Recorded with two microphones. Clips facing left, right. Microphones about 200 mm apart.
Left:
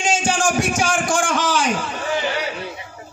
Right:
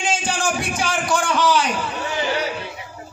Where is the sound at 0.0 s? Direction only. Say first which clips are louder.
Left 3 dB; 45° left (ahead or behind).